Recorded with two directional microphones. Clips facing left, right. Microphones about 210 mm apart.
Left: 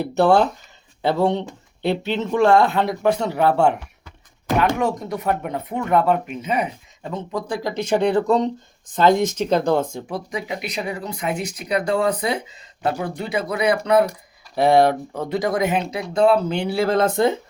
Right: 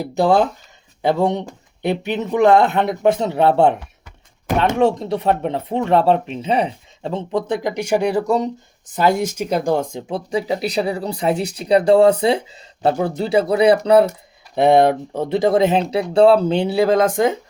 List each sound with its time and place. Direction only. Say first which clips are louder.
0.0 s speech: even; 15° right (ahead or behind)
10.1 s speech: right 6 dB; 30° right (ahead or behind); by 17.3 s 15° right (ahead or behind)